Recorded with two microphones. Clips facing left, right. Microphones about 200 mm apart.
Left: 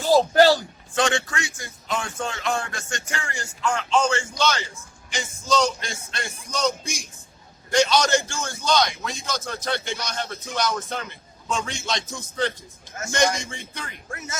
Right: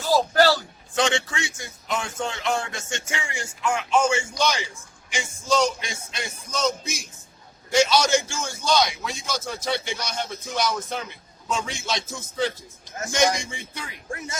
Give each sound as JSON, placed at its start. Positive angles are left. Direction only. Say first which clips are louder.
{"t": 0.3, "sound": "a man's voice", "louder": "left 3 dB", "side_deg": 20}
{"t": 0.9, "sound": "a man's voice", "louder": "even", "side_deg": -20}
{"t": 3.2, "sound": "a man's voice", "louder": "even", "side_deg": -10}